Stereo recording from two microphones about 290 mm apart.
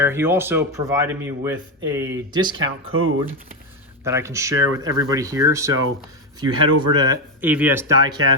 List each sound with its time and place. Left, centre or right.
0.0 s speech: centre
2.6 s speech: right
4.0 s speech: centre
6.6 s speech: right
6.9 s speech: centre